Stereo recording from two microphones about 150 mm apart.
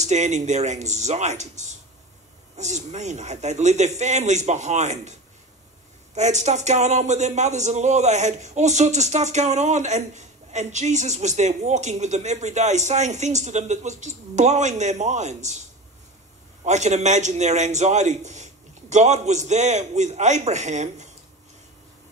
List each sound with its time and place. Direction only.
0.0 s speech: 50° right (ahead or behind)
2.5 s speech: 50° right (ahead or behind)
6.1 s speech: 50° right (ahead or behind)
16.6 s speech: 50° right (ahead or behind)